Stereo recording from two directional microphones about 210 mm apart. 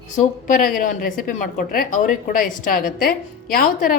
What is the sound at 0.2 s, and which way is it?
A woman's voice, 40° left (ahead or behind).